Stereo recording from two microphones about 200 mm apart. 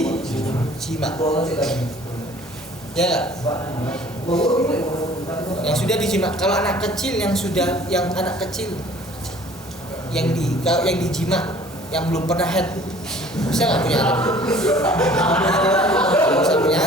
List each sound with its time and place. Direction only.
0.0 s a sound: 5° left (ahead or behind)
1.1 s speech: 25° left (ahead or behind)
1.5 s a woman's voice: 5° left (ahead or behind)
2.9 s a woman's voice: 5° left (ahead or behind)
3.4 s a man's voice: 15° left (ahead or behind)
4.3 s a woman's voice: 5° left (ahead or behind)
5.6 s a woman's voice: 5° left (ahead or behind)
10.1 s a man's voice: 5° left (ahead or behind)